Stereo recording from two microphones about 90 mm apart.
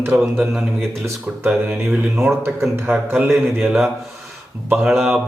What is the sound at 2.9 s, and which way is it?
Speech, 15° right (ahead or behind).